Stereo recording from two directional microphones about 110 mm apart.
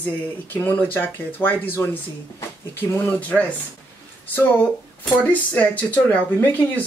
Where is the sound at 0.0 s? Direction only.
15° left (ahead or behind).